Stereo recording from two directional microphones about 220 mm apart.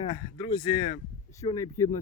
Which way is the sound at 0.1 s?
20° left (ahead or behind).